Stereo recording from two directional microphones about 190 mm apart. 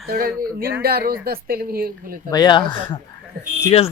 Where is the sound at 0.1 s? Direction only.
50° right (ahead or behind).